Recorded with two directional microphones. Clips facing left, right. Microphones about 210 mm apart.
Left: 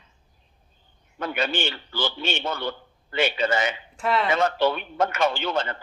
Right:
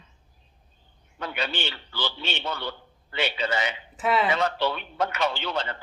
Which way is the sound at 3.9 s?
Centre (ahead or behind).